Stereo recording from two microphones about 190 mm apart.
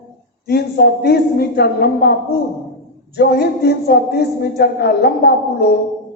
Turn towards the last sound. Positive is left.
turn(degrees=55)  # may be behind; listen again after turning